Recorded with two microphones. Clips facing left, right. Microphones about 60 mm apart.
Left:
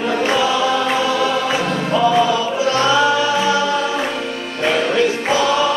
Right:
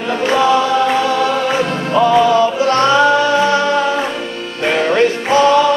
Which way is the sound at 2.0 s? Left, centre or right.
Right.